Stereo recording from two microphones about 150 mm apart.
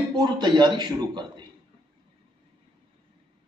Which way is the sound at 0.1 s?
30° right (ahead or behind).